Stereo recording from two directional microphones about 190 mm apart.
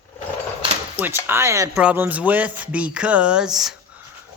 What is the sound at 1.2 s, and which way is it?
Speech, 15° right (ahead or behind).